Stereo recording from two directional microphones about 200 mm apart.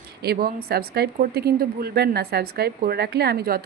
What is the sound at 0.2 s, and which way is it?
Speech, 50° right (ahead or behind).